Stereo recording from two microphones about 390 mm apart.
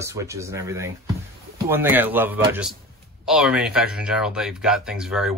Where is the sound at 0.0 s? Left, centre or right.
Centre.